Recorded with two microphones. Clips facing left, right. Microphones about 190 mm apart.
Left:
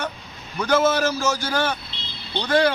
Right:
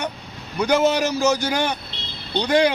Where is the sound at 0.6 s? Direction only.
15° right (ahead or behind).